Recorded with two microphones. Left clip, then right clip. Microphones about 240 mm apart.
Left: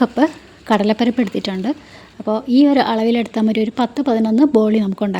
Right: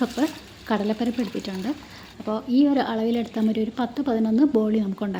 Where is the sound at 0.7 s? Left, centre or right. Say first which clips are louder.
Left 9 dB; left.